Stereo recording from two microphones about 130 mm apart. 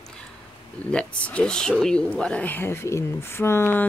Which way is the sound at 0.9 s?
10° left (ahead or behind).